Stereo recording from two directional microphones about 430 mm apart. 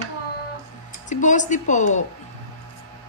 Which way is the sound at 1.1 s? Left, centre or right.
Centre.